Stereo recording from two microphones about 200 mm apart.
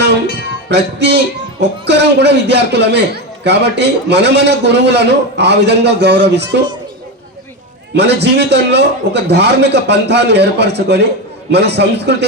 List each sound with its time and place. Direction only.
0.7 s a man's voice: 60° right (ahead or behind)
7.9 s a man's voice: 60° right (ahead or behind)